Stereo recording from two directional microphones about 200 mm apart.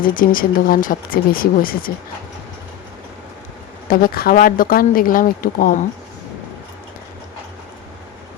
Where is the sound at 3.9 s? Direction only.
45° left (ahead or behind).